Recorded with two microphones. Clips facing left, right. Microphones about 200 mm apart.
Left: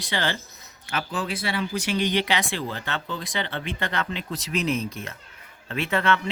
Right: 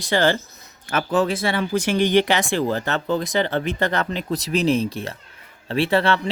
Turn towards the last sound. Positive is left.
turn(degrees=-35)  # may be behind; listen again after turning